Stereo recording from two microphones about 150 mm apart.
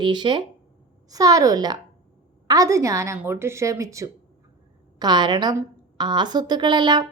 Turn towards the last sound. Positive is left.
turn(degrees=-30)  # may be behind; listen again after turning